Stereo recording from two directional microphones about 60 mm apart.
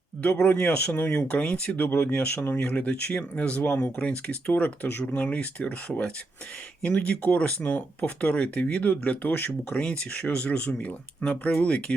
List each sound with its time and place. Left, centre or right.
0.2 s speech: left